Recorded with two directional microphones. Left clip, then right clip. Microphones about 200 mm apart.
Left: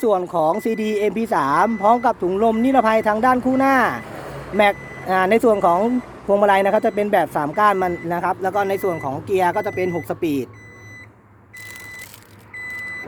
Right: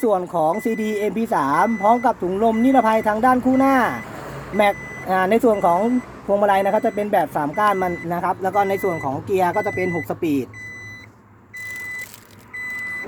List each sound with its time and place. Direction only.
0.0 s speech: 20° left (ahead or behind)
3.3 s speech: 30° left (ahead or behind)
3.6 s speech: 20° left (ahead or behind)
4.5 s speech: 15° left (ahead or behind)
10.2 s speech: 25° left (ahead or behind)